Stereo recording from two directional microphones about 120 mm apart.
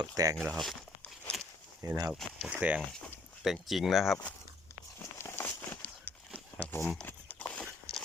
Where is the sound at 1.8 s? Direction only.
30° right (ahead or behind).